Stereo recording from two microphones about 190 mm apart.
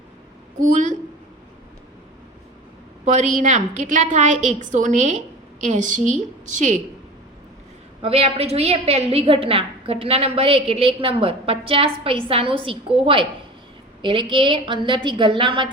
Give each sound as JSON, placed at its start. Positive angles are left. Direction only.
{"t": 0.6, "sound": "a woman's voice", "side_deg": -40}
{"t": 3.0, "sound": "a woman's voice", "side_deg": -40}
{"t": 8.0, "sound": "a woman's voice", "side_deg": -30}
{"t": 14.0, "sound": "a woman's voice", "side_deg": -25}